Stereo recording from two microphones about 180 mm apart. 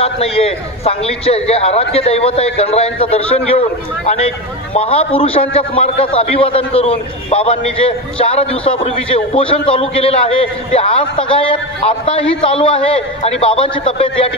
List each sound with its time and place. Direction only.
0.0 s a man's voice: 30° left (ahead or behind)